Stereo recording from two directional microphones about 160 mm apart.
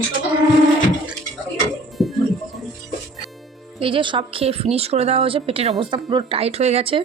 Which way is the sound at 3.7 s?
35° right (ahead or behind).